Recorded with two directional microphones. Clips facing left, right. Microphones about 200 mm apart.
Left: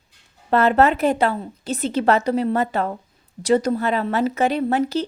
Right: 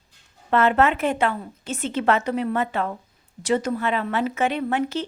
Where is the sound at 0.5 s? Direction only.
35° left (ahead or behind).